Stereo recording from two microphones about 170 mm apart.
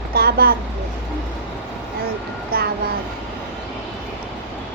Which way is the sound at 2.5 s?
60° right (ahead or behind).